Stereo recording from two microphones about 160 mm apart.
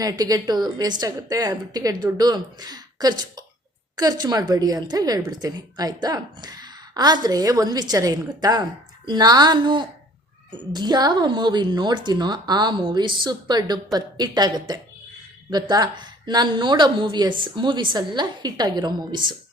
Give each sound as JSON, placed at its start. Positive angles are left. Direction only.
{"t": 0.0, "sound": "a woman's voice", "side_deg": -25}